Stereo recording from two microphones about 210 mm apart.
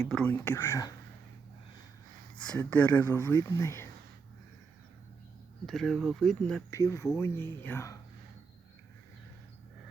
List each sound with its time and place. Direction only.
0.1 s speech: 5° left (ahead or behind)
2.5 s speech: 5° left (ahead or behind)
5.6 s speech: centre (ahead or behind)
6.7 s speech: 15° left (ahead or behind)